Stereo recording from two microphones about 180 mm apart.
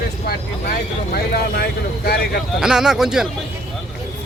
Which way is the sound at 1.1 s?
60° left (ahead or behind).